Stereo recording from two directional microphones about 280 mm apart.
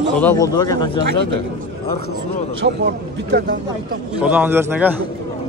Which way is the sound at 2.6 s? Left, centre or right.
Right.